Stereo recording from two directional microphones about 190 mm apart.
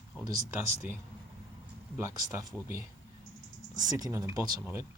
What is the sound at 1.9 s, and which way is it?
Speech, 15° right (ahead or behind).